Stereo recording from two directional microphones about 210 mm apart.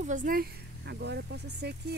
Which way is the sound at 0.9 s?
55° right (ahead or behind).